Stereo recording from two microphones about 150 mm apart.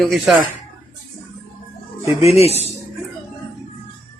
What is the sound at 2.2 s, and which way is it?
Speech, 45° left (ahead or behind).